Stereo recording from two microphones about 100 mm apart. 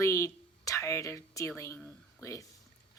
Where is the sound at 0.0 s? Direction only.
30° left (ahead or behind).